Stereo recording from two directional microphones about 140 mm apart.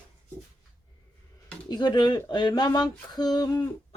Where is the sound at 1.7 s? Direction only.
30° left (ahead or behind).